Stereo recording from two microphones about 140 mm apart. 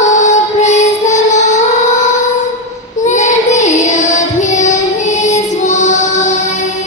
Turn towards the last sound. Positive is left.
turn(degrees=55)  # may be behind; listen again after turning